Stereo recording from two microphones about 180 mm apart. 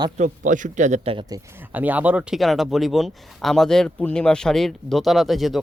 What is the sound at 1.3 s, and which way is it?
Speech, 20° right (ahead or behind).